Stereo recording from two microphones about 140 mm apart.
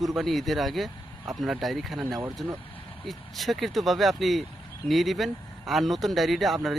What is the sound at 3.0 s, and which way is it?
Speech, centre (ahead or behind).